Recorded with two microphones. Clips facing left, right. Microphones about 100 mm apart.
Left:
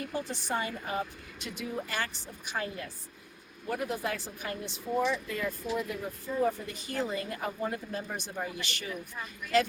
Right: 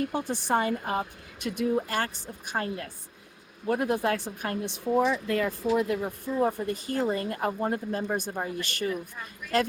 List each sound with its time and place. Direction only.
0.1 s a woman's voice: 65° right (ahead or behind)
5.3 s speech: 80° right; by 8.9 s 45° right (ahead or behind)